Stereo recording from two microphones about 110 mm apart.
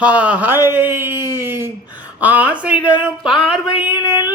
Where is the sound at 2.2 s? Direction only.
15° right (ahead or behind).